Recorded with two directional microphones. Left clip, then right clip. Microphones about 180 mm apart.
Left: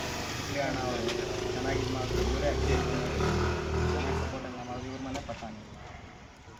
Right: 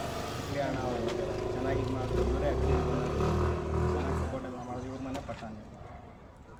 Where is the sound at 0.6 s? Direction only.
20° right (ahead or behind).